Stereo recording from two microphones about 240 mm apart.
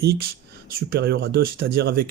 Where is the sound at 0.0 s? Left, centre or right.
Right.